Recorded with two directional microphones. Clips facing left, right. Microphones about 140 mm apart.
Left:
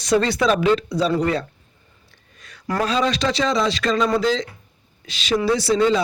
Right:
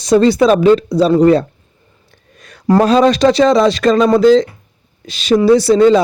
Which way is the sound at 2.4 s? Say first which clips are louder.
Right 6 dB; 45° right (ahead or behind).